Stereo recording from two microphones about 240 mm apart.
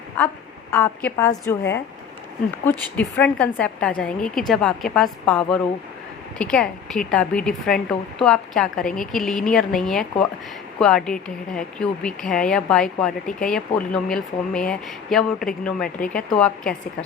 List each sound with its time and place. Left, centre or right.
0.7 s a woman's voice: centre
2.6 s speech: centre